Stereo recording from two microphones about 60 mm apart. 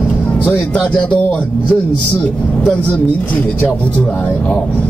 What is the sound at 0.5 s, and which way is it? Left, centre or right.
Speech, left.